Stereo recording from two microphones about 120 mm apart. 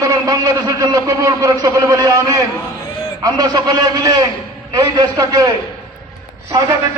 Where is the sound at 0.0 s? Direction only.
30° right (ahead or behind).